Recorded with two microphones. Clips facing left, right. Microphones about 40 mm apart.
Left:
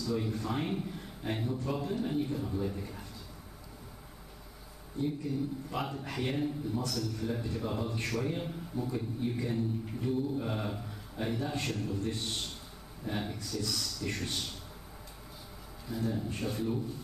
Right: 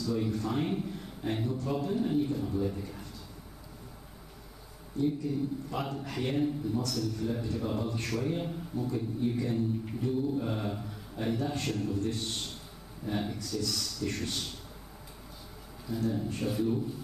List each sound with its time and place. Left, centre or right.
0.0 s a man's voice: centre
4.9 s a man's voice: centre
15.9 s a man's voice: centre